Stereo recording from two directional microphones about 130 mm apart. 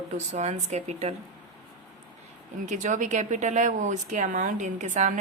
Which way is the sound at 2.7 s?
70° right (ahead or behind).